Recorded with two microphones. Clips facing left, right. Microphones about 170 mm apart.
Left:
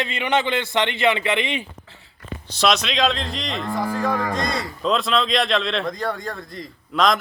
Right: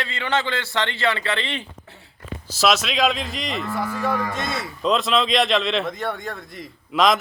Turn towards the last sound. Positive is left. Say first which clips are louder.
# right 1 dB
turn(degrees=0)  # may be behind; listen again after turning